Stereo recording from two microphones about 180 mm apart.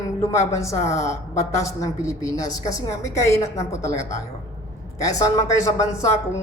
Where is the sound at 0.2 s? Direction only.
15° left (ahead or behind).